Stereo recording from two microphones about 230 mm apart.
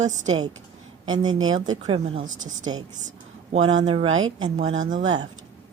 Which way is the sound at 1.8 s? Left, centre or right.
Right.